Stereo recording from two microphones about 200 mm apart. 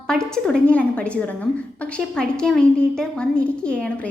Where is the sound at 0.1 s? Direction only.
5° left (ahead or behind).